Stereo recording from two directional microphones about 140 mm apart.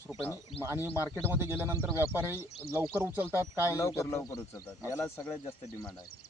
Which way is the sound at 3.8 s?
20° left (ahead or behind).